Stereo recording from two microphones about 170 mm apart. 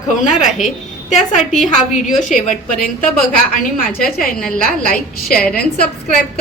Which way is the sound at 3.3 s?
55° left (ahead or behind).